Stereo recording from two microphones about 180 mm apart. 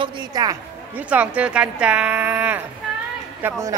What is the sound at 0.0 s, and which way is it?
Speech, 25° right (ahead or behind).